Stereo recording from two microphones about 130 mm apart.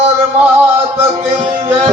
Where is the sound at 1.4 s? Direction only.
50° right (ahead or behind).